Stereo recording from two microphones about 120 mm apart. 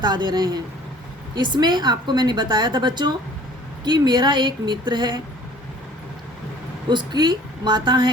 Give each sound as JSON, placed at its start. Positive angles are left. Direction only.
{"t": 0.0, "sound": "a woman's voice", "side_deg": -35}
{"t": 6.8, "sound": "a woman's voice", "side_deg": -40}